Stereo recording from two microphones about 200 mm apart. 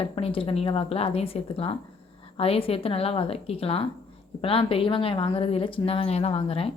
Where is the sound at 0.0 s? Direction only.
30° left (ahead or behind).